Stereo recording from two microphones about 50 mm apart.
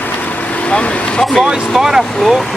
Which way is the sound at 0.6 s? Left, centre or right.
Left.